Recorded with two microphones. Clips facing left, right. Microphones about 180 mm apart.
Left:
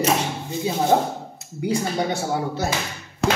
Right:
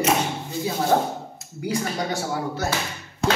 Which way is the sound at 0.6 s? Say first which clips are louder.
Left 2 dB; 25° left (ahead or behind).